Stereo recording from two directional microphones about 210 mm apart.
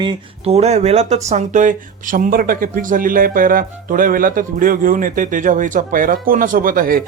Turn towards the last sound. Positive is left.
turn(degrees=-40)  # may be behind; listen again after turning